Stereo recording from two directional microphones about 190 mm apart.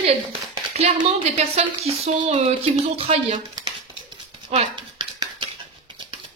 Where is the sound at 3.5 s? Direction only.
20° right (ahead or behind).